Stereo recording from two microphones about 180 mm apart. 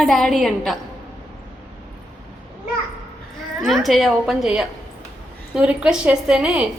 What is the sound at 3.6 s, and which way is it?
A woman's voice, centre (ahead or behind).